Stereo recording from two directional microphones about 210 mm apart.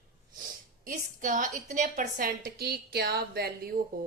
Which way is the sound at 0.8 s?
40° right (ahead or behind).